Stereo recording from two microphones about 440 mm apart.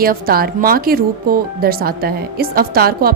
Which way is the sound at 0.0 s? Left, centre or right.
Centre.